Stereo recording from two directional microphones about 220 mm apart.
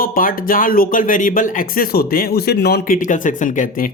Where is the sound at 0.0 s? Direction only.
40° left (ahead or behind).